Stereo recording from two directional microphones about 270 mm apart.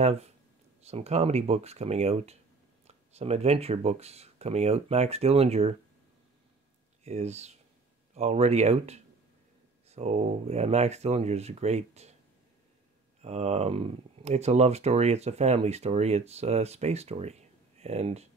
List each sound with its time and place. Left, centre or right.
0.0 s speech: right
7.1 s speech: right
13.2 s speech: right